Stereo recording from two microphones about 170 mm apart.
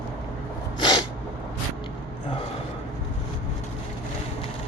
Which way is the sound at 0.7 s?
25° left (ahead or behind).